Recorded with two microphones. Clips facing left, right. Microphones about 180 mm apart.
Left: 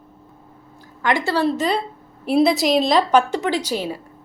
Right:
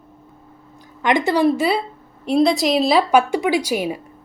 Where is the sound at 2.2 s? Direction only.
5° left (ahead or behind); by 4.0 s 15° right (ahead or behind).